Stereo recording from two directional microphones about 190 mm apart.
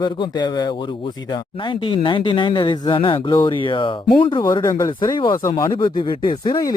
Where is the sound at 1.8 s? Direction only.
25° left (ahead or behind).